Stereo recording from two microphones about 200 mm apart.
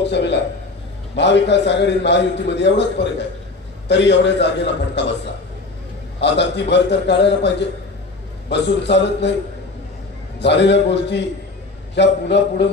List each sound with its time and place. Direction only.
0.0 s a man's voice: 60° left (ahead or behind)
6.2 s a man's voice: 60° left (ahead or behind)
10.4 s a man's voice: 60° left (ahead or behind)